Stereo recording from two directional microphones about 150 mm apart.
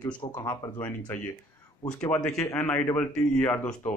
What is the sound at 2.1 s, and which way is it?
Speech, 5° left (ahead or behind).